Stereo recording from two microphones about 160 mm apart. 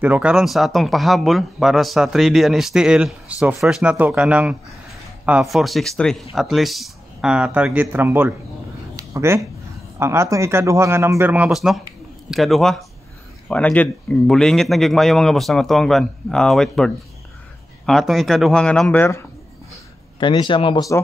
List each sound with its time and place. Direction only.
0.0 s speech: 10° right (ahead or behind)
8.9 s a sound: 20° right (ahead or behind)
9.9 s speech: 15° right (ahead or behind); by 19.0 s 10° left (ahead or behind)
20.2 s speech: 30° left (ahead or behind)